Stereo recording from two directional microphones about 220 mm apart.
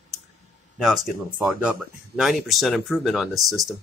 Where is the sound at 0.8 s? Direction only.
Centre (ahead or behind).